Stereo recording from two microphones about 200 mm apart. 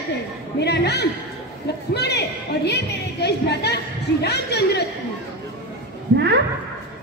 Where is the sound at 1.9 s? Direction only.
55° left (ahead or behind).